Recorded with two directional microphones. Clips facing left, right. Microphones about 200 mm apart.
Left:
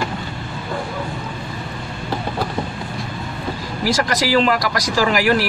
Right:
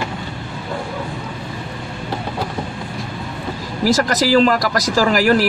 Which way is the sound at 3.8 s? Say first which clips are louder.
Right 3 dB; 40° right (ahead or behind).